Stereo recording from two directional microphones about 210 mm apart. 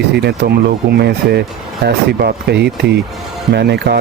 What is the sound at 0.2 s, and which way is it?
Speech, 50° right (ahead or behind).